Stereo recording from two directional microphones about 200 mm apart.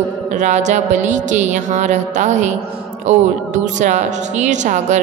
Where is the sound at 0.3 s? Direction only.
35° right (ahead or behind).